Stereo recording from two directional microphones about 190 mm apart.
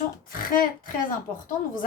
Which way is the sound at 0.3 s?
45° left (ahead or behind).